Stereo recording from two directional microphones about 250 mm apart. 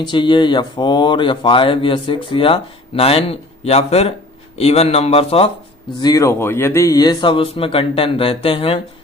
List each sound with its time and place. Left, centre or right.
0.0 s speech: centre